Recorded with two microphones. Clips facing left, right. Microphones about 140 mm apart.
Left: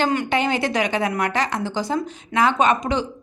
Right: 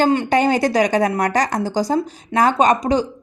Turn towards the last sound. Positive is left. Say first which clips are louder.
# right 4 dB
turn(degrees=-35)  # may be behind; listen again after turning